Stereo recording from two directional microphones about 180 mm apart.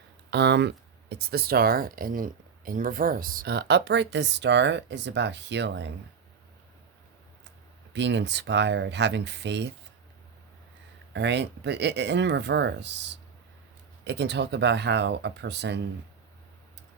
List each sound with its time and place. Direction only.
0.3 s speech: 70° right (ahead or behind)
7.9 s speech: 75° right (ahead or behind)
11.1 s speech: 75° right (ahead or behind)